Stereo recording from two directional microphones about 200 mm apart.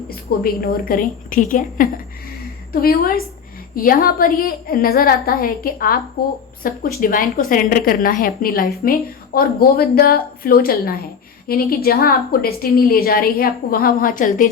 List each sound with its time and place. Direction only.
0.4 s a woman's voice: 45° left (ahead or behind)